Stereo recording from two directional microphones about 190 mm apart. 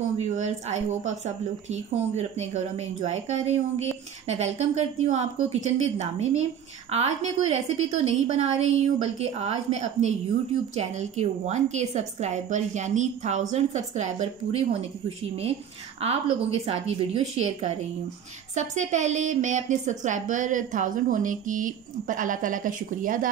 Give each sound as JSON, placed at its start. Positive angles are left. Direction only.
{"t": 0.2, "sound": "speech", "side_deg": -35}